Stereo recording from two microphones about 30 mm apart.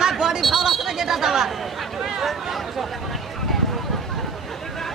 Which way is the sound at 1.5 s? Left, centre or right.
Centre.